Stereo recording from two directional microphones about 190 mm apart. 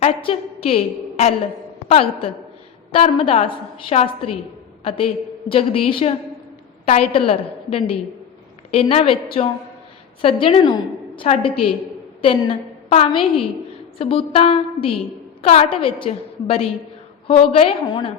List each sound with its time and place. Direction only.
0.0 s a woman's voice: 30° left (ahead or behind)